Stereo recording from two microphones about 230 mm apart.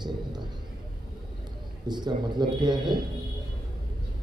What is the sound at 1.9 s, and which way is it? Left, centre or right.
A man's voice, centre.